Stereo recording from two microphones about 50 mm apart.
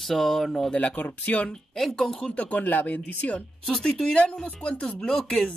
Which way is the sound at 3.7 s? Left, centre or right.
Centre.